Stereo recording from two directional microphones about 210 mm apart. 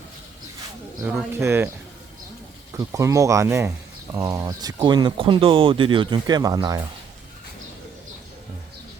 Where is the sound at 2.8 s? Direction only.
15° right (ahead or behind).